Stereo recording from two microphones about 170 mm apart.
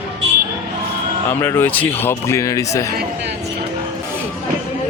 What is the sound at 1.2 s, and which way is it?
Speech, 15° left (ahead or behind).